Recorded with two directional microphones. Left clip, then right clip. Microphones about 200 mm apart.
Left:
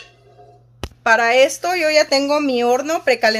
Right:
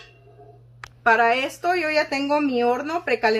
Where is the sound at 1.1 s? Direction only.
55° left (ahead or behind).